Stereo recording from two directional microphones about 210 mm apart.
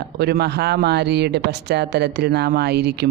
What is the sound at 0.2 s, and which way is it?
Speech, 50° right (ahead or behind).